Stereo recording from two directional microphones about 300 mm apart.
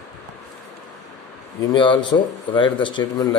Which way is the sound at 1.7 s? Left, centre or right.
Centre.